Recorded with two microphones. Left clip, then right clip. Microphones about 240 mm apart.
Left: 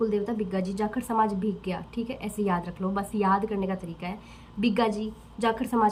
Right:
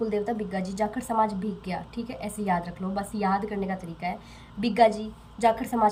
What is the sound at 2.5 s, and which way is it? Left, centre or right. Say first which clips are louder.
Speech: right 2 dB; left.